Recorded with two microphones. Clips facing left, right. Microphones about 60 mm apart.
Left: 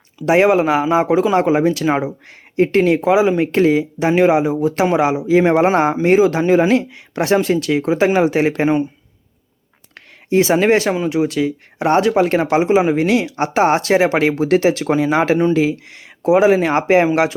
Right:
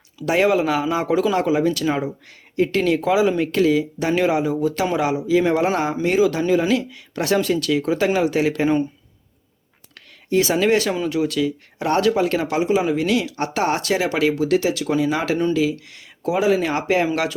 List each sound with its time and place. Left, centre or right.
0.3 s speech: left
4.7 s speech: left
10.3 s speech: left